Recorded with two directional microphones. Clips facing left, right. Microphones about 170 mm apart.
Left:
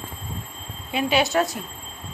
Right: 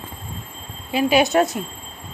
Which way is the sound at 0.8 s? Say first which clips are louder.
Right 5 dB; 5° right (ahead or behind).